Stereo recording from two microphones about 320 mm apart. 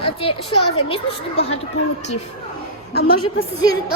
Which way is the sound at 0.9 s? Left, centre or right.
Centre.